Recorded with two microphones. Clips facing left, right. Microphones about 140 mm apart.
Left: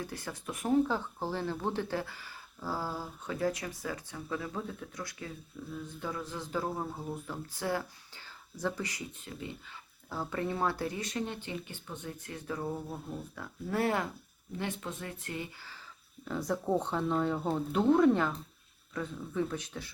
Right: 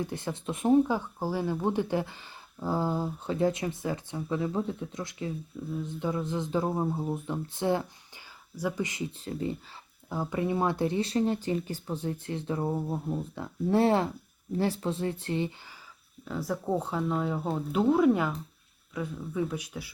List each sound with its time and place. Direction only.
0.0 s speech: 25° right (ahead or behind)
10.1 s speech: 15° right (ahead or behind)
16.2 s speech: 5° right (ahead or behind)